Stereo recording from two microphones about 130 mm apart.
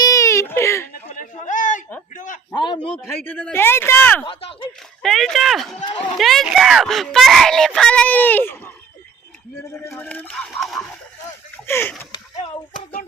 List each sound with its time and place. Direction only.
0.0 s baby cry: 25° left (ahead or behind)
1.1 s a sound: 80° left
2.5 s a man's voice: 35° left (ahead or behind)
3.2 s speech: 10° left (ahead or behind)
4.3 s speech: 45° left (ahead or behind)
5.0 s speech: centre (ahead or behind)
9.7 s speech: 20° left (ahead or behind); by 10.8 s centre (ahead or behind)
11.5 s a sound: 20° left (ahead or behind)